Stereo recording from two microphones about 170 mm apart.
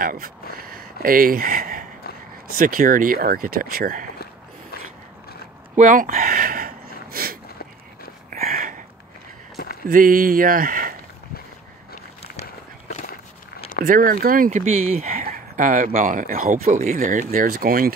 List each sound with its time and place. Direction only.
0.0 s speech: 55° right (ahead or behind)
5.8 s a sound: 50° right (ahead or behind)
9.8 s speech: 55° right (ahead or behind)
13.8 s speech: 55° right (ahead or behind)